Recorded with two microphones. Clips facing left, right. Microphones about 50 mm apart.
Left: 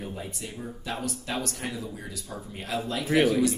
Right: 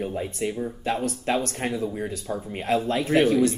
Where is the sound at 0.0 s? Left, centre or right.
Right.